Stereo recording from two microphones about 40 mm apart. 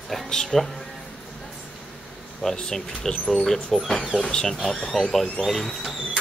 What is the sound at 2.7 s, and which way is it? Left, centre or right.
Speech, centre.